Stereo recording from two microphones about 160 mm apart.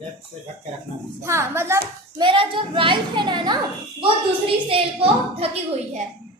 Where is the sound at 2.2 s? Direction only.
30° right (ahead or behind).